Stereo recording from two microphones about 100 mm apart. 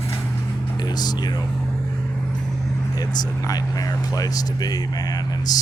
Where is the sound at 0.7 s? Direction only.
40° left (ahead or behind).